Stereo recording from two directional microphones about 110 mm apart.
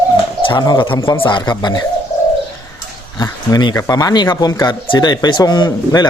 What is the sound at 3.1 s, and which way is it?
A man's voice, 35° left (ahead or behind).